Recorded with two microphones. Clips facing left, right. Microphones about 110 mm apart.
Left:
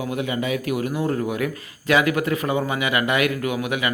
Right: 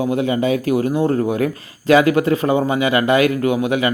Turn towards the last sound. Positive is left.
turn(degrees=-30)  # may be behind; listen again after turning